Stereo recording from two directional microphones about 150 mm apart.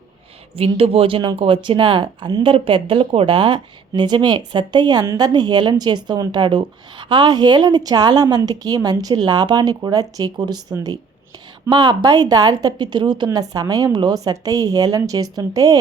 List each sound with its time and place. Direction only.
0.5 s speech: 40° right (ahead or behind); by 15.8 s 25° right (ahead or behind)